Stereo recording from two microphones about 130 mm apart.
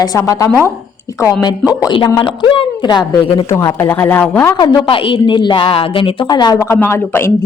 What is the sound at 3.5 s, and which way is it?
Speech, 20° left (ahead or behind).